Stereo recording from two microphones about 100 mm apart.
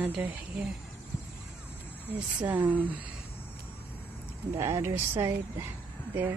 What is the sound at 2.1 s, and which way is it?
Speech, 15° right (ahead or behind).